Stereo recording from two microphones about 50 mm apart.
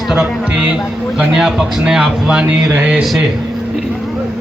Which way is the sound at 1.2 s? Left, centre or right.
Centre.